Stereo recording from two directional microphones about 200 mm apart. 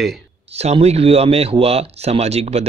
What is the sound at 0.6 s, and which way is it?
Speech, 30° right (ahead or behind).